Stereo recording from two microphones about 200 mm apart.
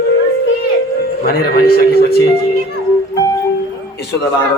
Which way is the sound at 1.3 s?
50° left (ahead or behind).